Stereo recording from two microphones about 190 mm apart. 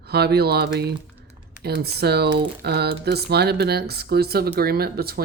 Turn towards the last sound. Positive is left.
turn(degrees=-55)  # may be behind; listen again after turning